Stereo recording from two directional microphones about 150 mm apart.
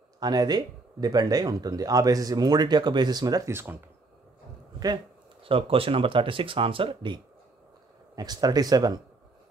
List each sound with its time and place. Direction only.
0.2 s speech: 25° right (ahead or behind)
4.7 s speech: 30° right (ahead or behind)
8.2 s speech: 25° right (ahead or behind)